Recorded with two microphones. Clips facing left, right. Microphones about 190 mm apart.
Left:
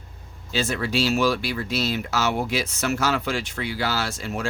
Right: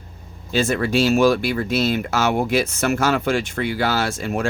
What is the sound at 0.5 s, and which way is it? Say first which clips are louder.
Speech: right 5 dB; 50° right (ahead or behind).